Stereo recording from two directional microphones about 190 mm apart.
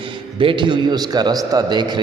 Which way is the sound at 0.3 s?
25° right (ahead or behind).